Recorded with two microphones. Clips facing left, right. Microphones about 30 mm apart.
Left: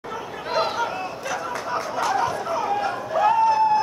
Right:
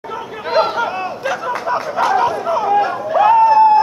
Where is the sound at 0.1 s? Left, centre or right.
Right.